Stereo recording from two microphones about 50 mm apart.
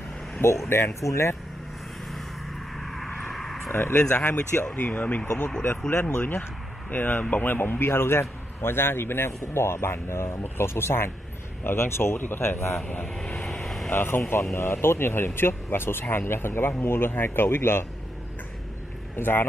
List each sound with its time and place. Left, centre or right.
0.7 s a man's voice: left
2.8 s vehicle: centre
3.7 s speech: left
4.2 s speech: left
5.9 s speech: left
7.8 s a man's voice: left
13.1 s vehicle: centre
13.8 s speech: left
19.1 s speech: left